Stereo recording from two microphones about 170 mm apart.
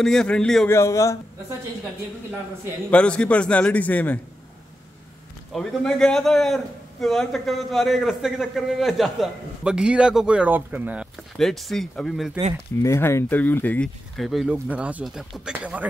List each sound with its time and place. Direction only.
0.0 s a man's voice: 5° left (ahead or behind)
0.7 s a man's voice: 15° left (ahead or behind)
2.9 s a man's voice: 5° left (ahead or behind)
5.5 s a man's voice: centre (ahead or behind)
11.3 s a man's voice: centre (ahead or behind)
12.8 s a man's voice: 15° left (ahead or behind); by 15.9 s 5° right (ahead or behind)